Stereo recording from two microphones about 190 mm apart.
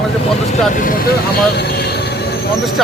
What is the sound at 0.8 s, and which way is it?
Speech, 55° left (ahead or behind).